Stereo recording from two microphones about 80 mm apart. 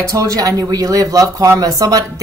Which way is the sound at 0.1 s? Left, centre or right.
Right.